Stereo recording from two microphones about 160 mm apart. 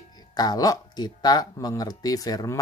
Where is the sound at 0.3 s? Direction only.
25° left (ahead or behind).